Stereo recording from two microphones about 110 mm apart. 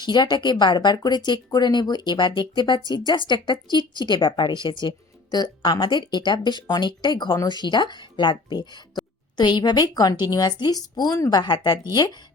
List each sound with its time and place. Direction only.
0.0 s a woman's voice: 40° left (ahead or behind)